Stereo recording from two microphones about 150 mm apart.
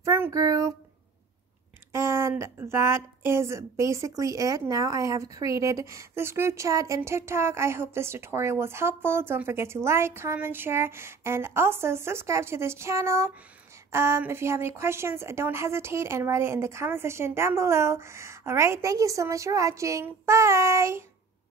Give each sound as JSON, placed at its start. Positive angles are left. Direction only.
{"t": 0.0, "sound": "speech", "side_deg": -20}
{"t": 1.9, "sound": "a woman's voice", "side_deg": -15}